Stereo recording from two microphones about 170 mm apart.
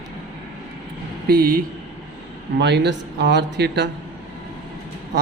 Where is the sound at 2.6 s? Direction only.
85° right.